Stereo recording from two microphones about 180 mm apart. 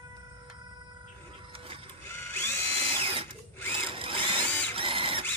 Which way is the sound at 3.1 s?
30° right (ahead or behind).